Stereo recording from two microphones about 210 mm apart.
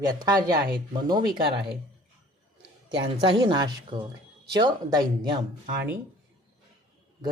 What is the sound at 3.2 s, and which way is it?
Speech, 20° right (ahead or behind).